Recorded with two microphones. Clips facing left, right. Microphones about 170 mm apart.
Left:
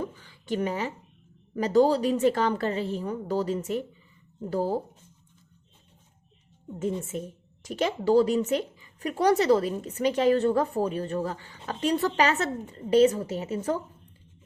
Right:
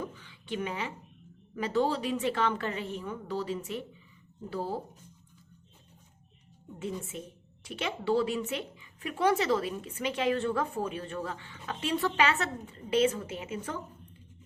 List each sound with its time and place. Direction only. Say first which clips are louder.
0.0 s a sound: left 5 dB; 45° left (ahead or behind)
1.5 s speech: left 7 dB; 40° left (ahead or behind)
7.0 s speech: left 7 dB; 45° left (ahead or behind)